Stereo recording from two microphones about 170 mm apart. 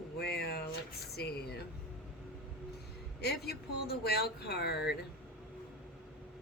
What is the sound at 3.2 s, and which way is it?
A woman's voice, 70° left (ahead or behind).